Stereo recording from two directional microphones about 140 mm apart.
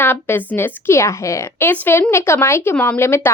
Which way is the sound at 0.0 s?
15° left (ahead or behind).